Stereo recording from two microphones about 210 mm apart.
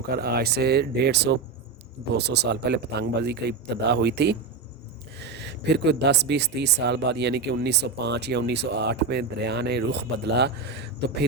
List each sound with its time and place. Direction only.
0.1 s speech: 50° right (ahead or behind)